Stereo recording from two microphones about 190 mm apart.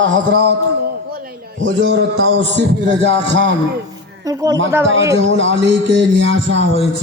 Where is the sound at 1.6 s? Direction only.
85° right; by 3.5 s 65° right (ahead or behind).